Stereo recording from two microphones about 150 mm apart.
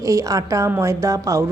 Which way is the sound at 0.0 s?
20° right (ahead or behind).